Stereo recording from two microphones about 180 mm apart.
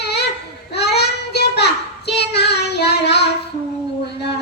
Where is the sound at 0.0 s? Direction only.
65° left (ahead or behind).